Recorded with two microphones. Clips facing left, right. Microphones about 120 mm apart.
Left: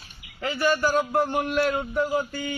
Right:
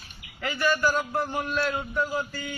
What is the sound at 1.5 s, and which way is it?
Speech, 60° left (ahead or behind).